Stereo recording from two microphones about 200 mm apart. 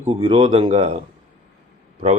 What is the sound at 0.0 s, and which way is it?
Speech, 25° right (ahead or behind).